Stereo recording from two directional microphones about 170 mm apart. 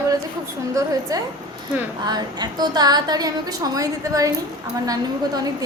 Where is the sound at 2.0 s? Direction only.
25° right (ahead or behind).